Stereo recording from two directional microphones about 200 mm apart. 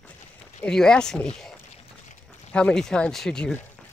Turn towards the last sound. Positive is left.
turn(degrees=5)  # may be behind; listen again after turning